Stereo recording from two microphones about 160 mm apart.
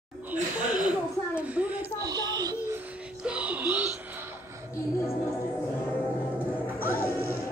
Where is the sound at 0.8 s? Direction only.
10° right (ahead or behind).